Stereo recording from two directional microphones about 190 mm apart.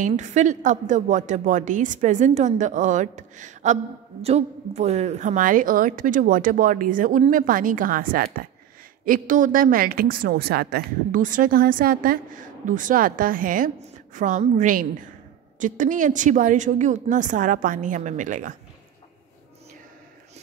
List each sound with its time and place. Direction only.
0.0 s a woman's voice: 40° right (ahead or behind)